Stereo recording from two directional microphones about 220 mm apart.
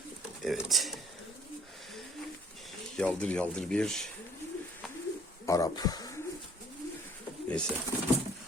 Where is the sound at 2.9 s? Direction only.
5° left (ahead or behind).